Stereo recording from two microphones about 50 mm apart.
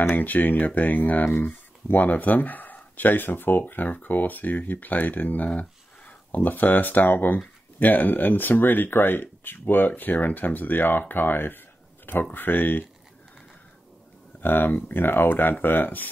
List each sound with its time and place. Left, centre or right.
0.1 s speech: left
14.4 s speech: left